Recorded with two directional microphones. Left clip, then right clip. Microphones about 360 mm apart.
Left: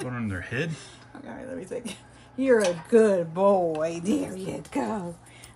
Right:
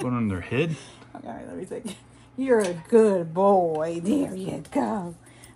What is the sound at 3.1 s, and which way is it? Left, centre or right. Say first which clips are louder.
Speech: right 2 dB; centre.